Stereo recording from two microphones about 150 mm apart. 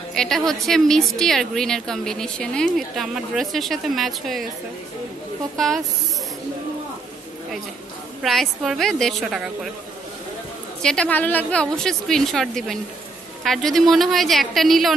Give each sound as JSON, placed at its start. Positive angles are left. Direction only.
{"t": 0.1, "sound": "a woman's voice", "side_deg": 5}
{"t": 8.2, "sound": "a woman's voice", "side_deg": 0}
{"t": 10.8, "sound": "a woman's voice", "side_deg": 5}